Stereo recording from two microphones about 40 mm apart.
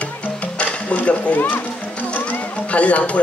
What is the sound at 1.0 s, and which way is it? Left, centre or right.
Speech, left.